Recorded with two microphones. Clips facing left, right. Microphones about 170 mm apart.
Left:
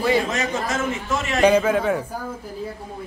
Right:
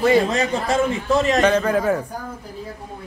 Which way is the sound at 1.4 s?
10° left (ahead or behind).